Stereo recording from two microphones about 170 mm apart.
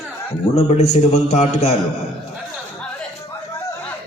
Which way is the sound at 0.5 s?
40° left (ahead or behind).